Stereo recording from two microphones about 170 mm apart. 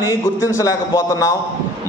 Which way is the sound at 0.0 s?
20° left (ahead or behind).